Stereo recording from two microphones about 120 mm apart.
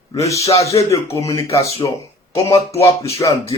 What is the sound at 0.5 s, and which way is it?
Speech, 25° left (ahead or behind).